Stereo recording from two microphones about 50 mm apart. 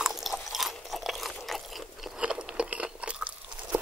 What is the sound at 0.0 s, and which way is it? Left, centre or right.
Chewing, centre.